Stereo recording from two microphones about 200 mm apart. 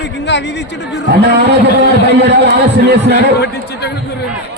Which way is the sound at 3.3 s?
55° left (ahead or behind).